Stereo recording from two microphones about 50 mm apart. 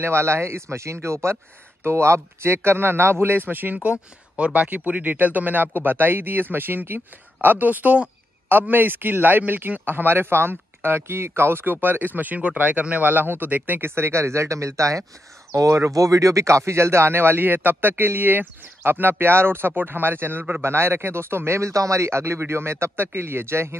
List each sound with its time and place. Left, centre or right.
0.0 s speech: right
8.5 s speech: right
20.6 s speech: right